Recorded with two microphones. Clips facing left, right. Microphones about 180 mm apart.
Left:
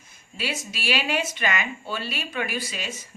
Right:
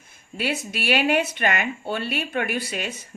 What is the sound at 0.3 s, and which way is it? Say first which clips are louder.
A woman's voice: right 5 dB; 60° right (ahead or behind).